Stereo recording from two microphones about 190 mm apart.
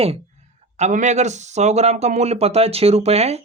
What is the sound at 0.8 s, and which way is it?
Speech, 40° right (ahead or behind).